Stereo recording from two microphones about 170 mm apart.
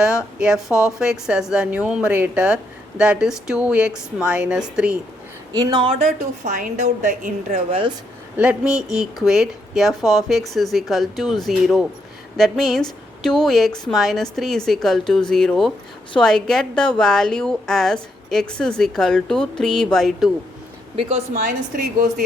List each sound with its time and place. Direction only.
0.3 s a woman's voice: 5° right (ahead or behind)
0.7 s a woman's voice: 20° left (ahead or behind)
0.9 s a woman's voice: 5° right (ahead or behind)
5.5 s a woman's voice: 25° right (ahead or behind); by 7.3 s 50° right (ahead or behind)
7.5 s speech: 30° right (ahead or behind)
8.4 s a woman's voice: 5° right (ahead or behind)
20.9 s speech: 35° right (ahead or behind)